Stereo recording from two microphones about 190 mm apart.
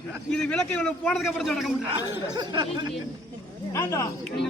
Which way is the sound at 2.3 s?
25° right (ahead or behind).